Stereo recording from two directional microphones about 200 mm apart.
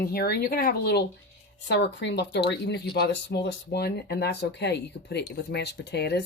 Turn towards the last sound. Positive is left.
turn(degrees=55)  # may be behind; listen again after turning